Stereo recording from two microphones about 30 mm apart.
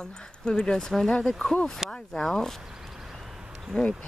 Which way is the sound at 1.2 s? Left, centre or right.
Centre.